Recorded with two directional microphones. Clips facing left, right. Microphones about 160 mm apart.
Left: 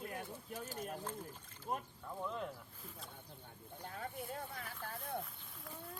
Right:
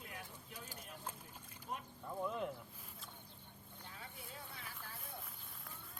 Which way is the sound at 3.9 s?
50° left (ahead or behind).